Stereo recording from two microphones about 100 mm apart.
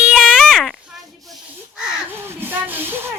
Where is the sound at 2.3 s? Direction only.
20° right (ahead or behind).